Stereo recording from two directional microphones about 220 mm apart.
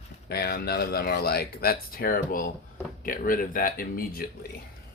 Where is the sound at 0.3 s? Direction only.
45° left (ahead or behind).